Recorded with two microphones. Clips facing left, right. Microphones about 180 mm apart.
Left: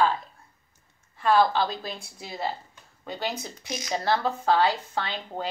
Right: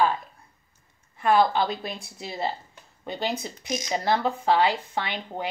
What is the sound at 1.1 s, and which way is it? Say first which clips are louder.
Speech: right 1 dB; 20° right (ahead or behind).